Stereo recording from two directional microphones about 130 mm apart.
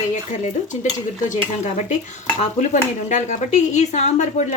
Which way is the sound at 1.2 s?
70° left (ahead or behind).